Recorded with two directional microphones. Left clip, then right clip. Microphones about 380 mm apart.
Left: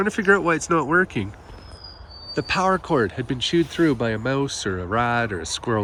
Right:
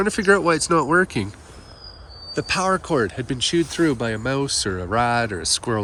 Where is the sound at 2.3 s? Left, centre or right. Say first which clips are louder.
Even; centre.